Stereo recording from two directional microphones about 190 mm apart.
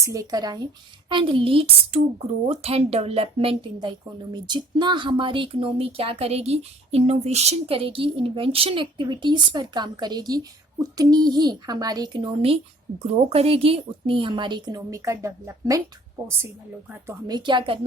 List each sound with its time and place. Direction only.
0.0 s speech: 15° right (ahead or behind)
17.1 s speech: 20° right (ahead or behind)